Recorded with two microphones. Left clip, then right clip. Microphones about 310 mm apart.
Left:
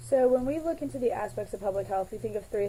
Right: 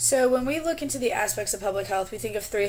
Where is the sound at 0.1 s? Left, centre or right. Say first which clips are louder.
Right 1 dB; right.